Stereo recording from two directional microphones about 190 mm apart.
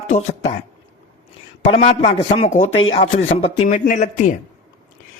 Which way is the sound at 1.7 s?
35° left (ahead or behind).